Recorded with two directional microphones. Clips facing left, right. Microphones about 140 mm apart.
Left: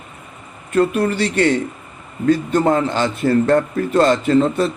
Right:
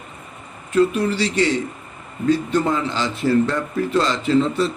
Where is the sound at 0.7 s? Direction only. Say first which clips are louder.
Left 1 dB; 55° left (ahead or behind).